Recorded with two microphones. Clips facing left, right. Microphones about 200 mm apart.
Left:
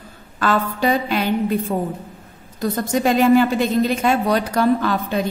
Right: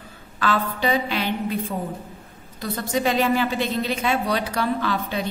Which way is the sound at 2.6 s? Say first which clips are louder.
Left 5 dB; 45° left (ahead or behind).